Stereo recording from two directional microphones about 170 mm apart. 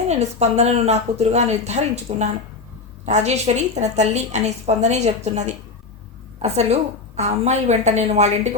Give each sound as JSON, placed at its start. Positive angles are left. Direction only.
{"t": 0.1, "sound": "a woman's voice", "side_deg": -40}